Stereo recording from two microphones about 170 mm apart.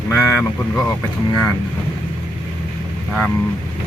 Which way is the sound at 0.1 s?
15° left (ahead or behind).